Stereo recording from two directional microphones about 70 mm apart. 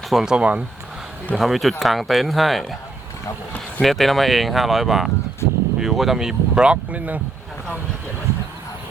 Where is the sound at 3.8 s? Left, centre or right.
Centre; by 7.2 s right.